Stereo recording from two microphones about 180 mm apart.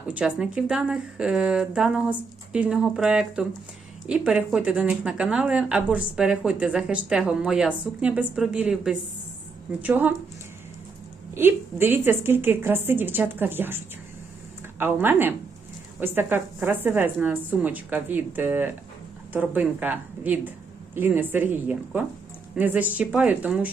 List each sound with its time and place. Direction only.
0.1 s a woman's voice: 5° right (ahead or behind)
11.3 s a woman's voice: 10° right (ahead or behind)